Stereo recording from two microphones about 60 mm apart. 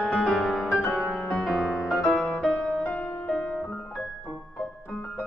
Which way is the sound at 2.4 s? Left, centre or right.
Centre.